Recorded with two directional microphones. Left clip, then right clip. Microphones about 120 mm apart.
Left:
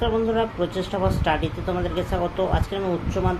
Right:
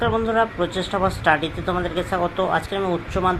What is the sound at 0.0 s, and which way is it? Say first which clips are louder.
Speech: right 3 dB; 25° right (ahead or behind).